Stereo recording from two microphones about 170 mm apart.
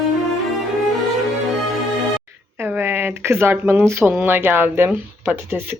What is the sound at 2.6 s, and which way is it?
Speech, 10° right (ahead or behind).